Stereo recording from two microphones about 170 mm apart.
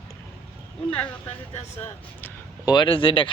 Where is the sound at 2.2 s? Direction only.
25° left (ahead or behind).